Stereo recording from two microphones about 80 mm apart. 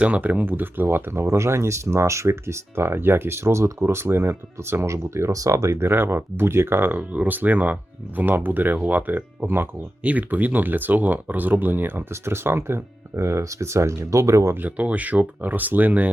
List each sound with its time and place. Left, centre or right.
0.0 s speech: centre; by 14.5 s right
14.5 s speech: centre